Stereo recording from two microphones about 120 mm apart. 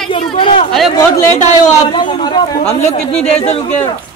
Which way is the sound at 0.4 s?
50° left (ahead or behind).